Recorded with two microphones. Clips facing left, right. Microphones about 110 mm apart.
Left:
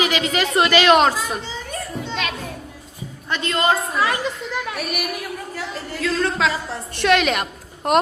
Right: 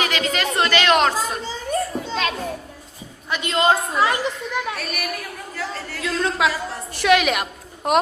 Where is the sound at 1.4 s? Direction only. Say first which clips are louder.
Right 6 dB; 40° right (ahead or behind).